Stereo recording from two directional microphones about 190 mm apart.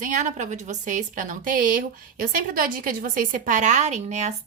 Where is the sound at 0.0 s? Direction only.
40° right (ahead or behind).